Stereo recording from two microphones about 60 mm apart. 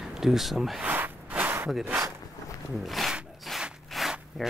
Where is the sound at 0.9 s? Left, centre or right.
Right.